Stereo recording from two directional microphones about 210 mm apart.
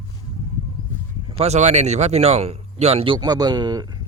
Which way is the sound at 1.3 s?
30° right (ahead or behind).